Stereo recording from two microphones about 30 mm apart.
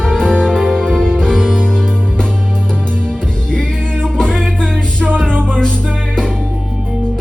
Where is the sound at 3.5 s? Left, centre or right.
Left.